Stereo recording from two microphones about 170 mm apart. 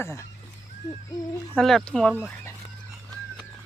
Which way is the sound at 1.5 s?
Centre (ahead or behind).